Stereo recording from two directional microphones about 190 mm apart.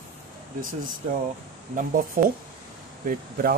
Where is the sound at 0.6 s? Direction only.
45° right (ahead or behind).